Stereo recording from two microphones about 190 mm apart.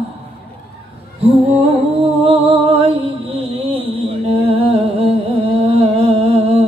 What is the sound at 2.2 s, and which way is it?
Music, 30° right (ahead or behind).